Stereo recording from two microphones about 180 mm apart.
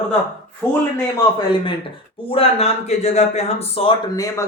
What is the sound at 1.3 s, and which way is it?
Speech, 30° left (ahead or behind).